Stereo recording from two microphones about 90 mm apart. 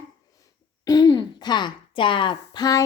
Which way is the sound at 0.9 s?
50° left (ahead or behind).